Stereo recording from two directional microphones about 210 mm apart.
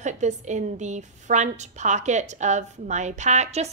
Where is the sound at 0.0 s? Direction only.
35° right (ahead or behind).